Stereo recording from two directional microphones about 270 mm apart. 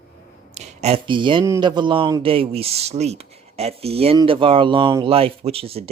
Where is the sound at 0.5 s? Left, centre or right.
Right.